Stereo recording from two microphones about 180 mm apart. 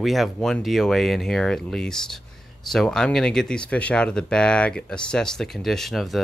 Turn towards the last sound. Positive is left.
turn(degrees=0)  # may be behind; listen again after turning